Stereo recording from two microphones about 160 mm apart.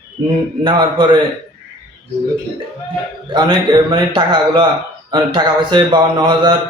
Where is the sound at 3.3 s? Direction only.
30° right (ahead or behind).